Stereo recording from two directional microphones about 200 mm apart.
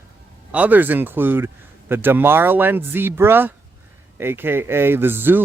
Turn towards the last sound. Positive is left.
turn(degrees=-10)  # may be behind; listen again after turning